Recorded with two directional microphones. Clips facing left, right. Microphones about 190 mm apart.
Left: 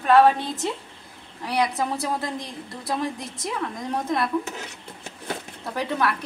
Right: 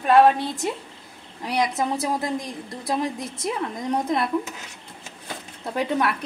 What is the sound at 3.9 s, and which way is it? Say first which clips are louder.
Speech: right 2 dB; 25° right (ahead or behind).